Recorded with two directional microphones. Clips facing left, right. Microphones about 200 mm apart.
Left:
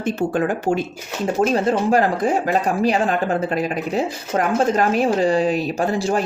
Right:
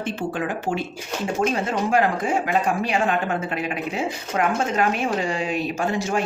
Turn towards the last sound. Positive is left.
turn(degrees=35)  # may be behind; listen again after turning